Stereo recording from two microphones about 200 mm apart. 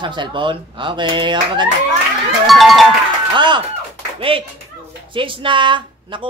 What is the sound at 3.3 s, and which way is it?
Speech, 25° right (ahead or behind).